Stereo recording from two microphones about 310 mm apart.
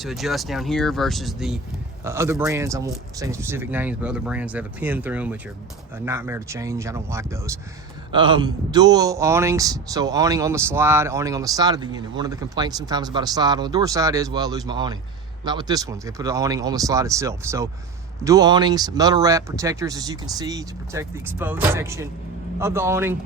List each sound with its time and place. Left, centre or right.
0.0 s a man's voice: centre